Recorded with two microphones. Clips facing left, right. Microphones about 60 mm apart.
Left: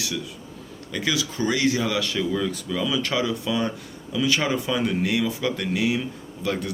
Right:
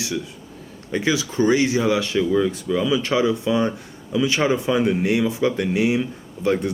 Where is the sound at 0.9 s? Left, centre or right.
Right.